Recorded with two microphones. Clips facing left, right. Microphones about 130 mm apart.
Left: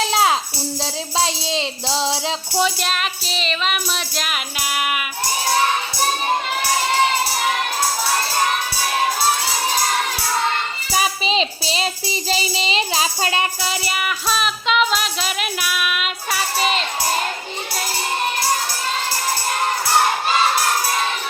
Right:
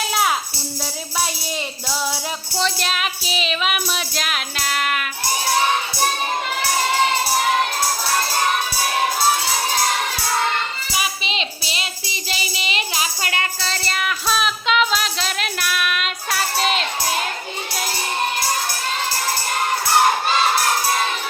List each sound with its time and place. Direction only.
0.0 s music: 25° left (ahead or behind)
1.2 s speech: 25° left (ahead or behind)
2.6 s music: 5° left (ahead or behind)
10.9 s child singing: 35° left (ahead or behind); by 17.2 s centre (ahead or behind)